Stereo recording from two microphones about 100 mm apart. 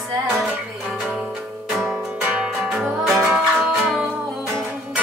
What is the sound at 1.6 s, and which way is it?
Music, 5° right (ahead or behind).